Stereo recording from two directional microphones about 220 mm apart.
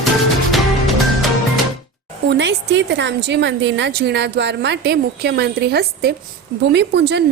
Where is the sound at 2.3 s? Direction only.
55° right (ahead or behind).